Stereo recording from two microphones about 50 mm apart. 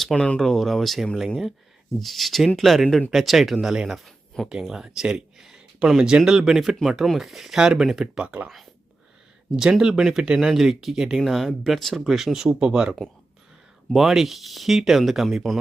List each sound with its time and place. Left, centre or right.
0.3 s speech: centre
4.7 s speech: centre
8.0 s speech: right
9.6 s speech: centre
13.9 s speech: centre